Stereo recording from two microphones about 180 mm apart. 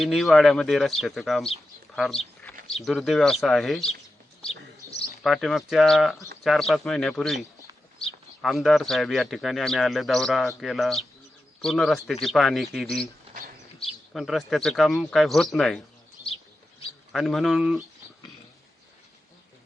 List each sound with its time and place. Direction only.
0.0 s speech: centre (ahead or behind)
2.6 s speech: centre (ahead or behind)
4.4 s bird: 30° left (ahead or behind)
5.2 s speech: centre (ahead or behind)
14.1 s speech: centre (ahead or behind)
16.2 s bird: 10° right (ahead or behind)
17.1 s speech: centre (ahead or behind)